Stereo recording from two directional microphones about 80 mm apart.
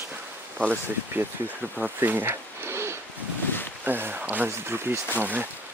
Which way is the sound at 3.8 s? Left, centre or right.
Right.